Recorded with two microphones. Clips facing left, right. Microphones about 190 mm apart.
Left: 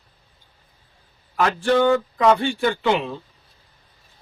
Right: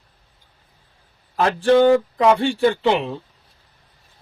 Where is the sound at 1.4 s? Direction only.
30° right (ahead or behind).